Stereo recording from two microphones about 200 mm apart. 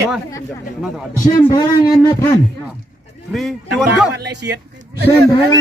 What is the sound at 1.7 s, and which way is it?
Speech, 15° left (ahead or behind).